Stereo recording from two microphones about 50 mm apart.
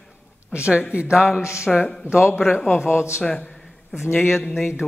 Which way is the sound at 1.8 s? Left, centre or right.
Left.